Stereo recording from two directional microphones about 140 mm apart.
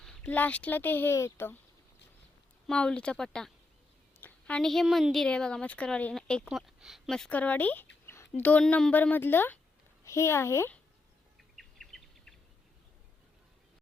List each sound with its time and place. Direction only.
0.0 s a woman's voice: 10° left (ahead or behind)
2.6 s a woman's voice: 5° left (ahead or behind)
11.5 s a sound: centre (ahead or behind)